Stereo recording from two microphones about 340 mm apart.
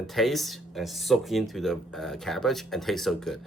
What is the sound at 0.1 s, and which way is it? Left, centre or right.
Speech, centre.